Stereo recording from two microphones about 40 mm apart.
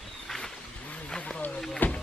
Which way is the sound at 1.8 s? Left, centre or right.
Left.